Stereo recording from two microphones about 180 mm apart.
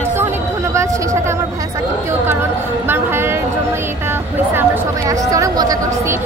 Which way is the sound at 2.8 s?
15° right (ahead or behind).